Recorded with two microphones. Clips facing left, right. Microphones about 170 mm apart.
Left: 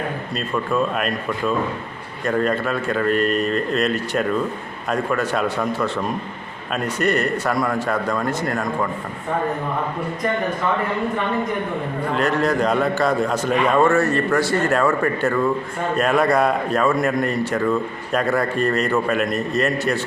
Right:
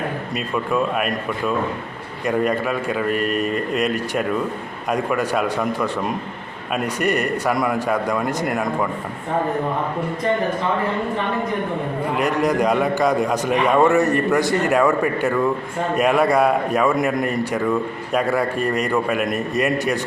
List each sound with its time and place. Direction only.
0.3 s a man's voice: 10° right (ahead or behind)
12.1 s a man's voice: 15° right (ahead or behind)